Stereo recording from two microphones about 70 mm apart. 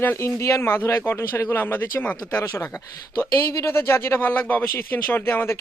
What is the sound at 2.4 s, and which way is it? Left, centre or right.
Speech, left.